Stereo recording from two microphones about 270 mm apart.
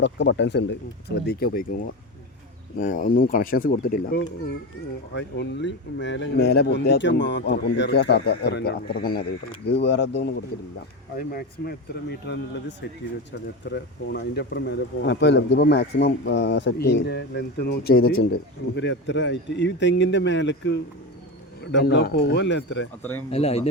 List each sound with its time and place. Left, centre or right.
0.0 s speech: left
23.3 s speech: left